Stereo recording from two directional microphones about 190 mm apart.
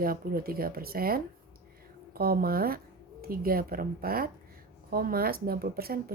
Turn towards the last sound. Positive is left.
turn(degrees=-55)  # may be behind; listen again after turning